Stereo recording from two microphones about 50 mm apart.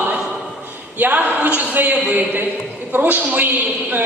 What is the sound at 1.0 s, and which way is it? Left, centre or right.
A man's voice, right.